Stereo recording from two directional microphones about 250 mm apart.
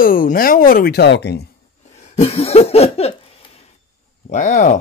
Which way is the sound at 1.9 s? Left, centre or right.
Left.